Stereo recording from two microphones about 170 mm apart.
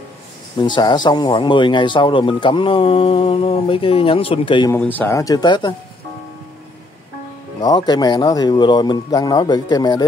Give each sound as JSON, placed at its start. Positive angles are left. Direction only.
{"t": 0.6, "sound": "speech", "side_deg": 25}
{"t": 4.6, "sound": "speech", "side_deg": 10}
{"t": 7.6, "sound": "speech", "side_deg": 25}